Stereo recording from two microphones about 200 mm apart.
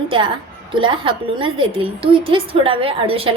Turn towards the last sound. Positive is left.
turn(degrees=-30)  # may be behind; listen again after turning